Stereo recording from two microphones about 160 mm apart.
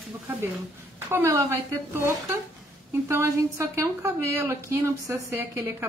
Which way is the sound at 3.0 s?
15° right (ahead or behind).